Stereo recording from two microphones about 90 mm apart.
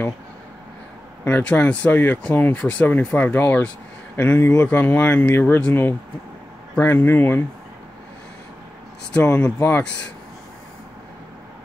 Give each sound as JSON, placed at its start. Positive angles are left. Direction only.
{"t": 1.2, "sound": "speech", "side_deg": 20}
{"t": 9.1, "sound": "speech", "side_deg": 20}